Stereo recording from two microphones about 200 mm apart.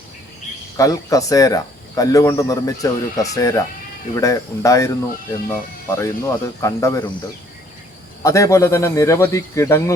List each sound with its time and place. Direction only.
0.8 s speech: 15° left (ahead or behind)
8.2 s speech: 15° left (ahead or behind)